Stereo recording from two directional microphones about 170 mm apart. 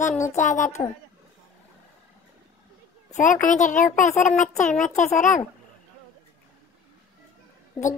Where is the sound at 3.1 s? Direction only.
45° left (ahead or behind).